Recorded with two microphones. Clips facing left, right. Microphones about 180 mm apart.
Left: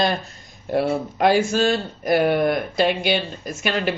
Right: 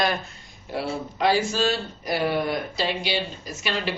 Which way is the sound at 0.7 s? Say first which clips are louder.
Left 8 dB; 50° left (ahead or behind).